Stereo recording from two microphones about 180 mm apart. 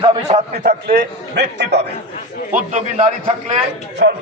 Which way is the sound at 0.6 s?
60° right (ahead or behind).